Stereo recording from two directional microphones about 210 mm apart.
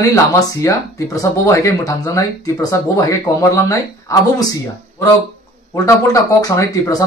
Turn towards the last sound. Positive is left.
turn(degrees=15)  # may be behind; listen again after turning